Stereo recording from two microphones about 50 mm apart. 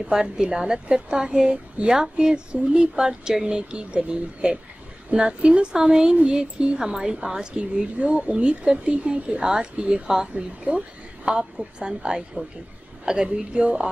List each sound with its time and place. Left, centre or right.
0.0 s a woman's voice: centre
11.5 s a woman's voice: centre